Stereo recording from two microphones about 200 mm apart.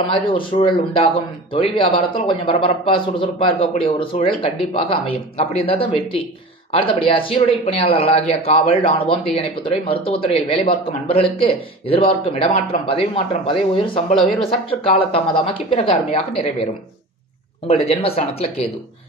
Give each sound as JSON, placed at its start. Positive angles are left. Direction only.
{"t": 0.0, "sound": "speech", "side_deg": 25}
{"t": 17.6, "sound": "speech", "side_deg": 30}